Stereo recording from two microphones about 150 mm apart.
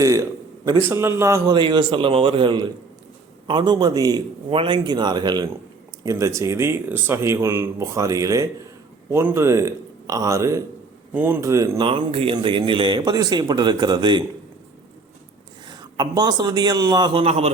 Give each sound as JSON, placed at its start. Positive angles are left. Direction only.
{"t": 0.0, "sound": "a sound", "side_deg": -20}
{"t": 0.9, "sound": "a man's voice", "side_deg": -15}
{"t": 1.5, "sound": "a man's voice", "side_deg": -35}
{"t": 11.8, "sound": "a man's voice", "side_deg": -35}
{"t": 15.7, "sound": "a man's voice", "side_deg": -25}
{"t": 17.2, "sound": "a man's voice", "side_deg": -45}